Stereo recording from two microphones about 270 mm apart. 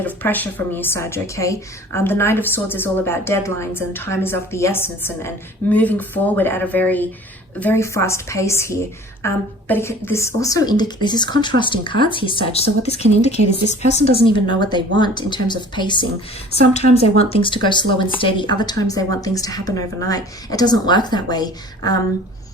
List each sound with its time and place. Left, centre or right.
0.0 s a woman's voice: centre